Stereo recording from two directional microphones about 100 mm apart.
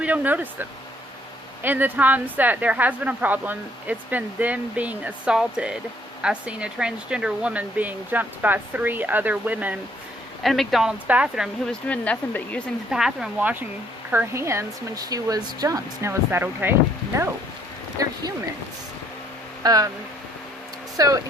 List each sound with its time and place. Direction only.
0.0 s speech: 15° right (ahead or behind)
10.4 s speech: centre (ahead or behind)
11.6 s speech: 10° left (ahead or behind)
12.9 s speech: 5° right (ahead or behind); by 16.1 s 35° right (ahead or behind)
16.3 s speech: 20° right (ahead or behind)
18.0 s speech: 35° right (ahead or behind)
19.6 s speech: 35° right (ahead or behind)
20.9 s speech: 35° right (ahead or behind)